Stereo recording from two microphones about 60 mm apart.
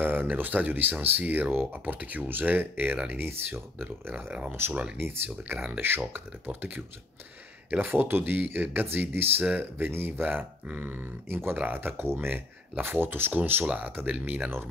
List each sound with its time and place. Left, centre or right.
0.0 s speech: right
4.1 s speech: right
4.5 s speech: right
7.8 s speech: right
10.2 s speech: right
11.2 s speech: right
11.5 s speech: right
12.0 s speech: right
12.3 s speech: right
13.7 s speech: right